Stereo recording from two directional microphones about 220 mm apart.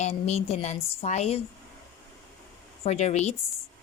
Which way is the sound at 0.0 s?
30° left (ahead or behind).